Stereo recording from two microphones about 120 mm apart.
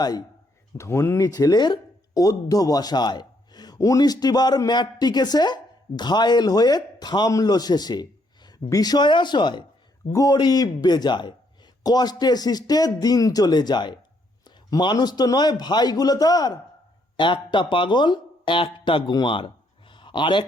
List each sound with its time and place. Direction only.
0.8 s speech: 25° left (ahead or behind)
17.2 s speech: 45° left (ahead or behind)
19.9 s a sound: 45° left (ahead or behind)